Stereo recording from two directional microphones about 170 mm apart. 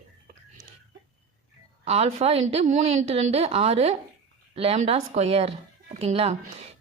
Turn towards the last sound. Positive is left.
turn(degrees=-35)  # may be behind; listen again after turning